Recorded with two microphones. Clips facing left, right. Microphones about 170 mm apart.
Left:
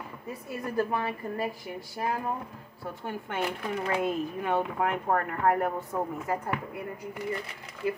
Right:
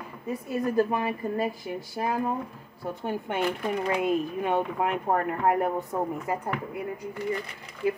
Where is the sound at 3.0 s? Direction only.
20° right (ahead or behind).